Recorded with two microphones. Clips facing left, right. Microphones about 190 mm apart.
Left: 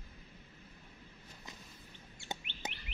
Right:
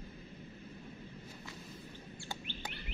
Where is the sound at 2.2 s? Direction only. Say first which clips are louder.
Left 2 dB; 20° left (ahead or behind).